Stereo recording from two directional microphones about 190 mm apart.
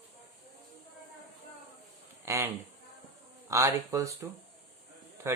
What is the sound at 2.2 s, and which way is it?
Speech, 15° right (ahead or behind).